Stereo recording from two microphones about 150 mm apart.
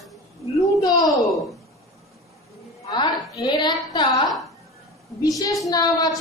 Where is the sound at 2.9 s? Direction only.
25° left (ahead or behind).